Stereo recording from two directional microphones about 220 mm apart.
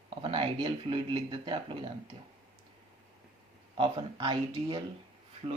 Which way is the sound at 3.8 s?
20° right (ahead or behind).